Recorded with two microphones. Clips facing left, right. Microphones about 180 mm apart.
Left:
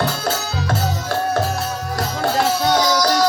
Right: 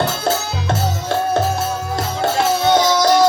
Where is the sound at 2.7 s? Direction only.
25° right (ahead or behind).